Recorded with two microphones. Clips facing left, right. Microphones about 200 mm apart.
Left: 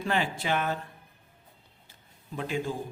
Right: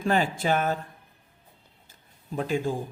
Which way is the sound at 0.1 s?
40° right (ahead or behind).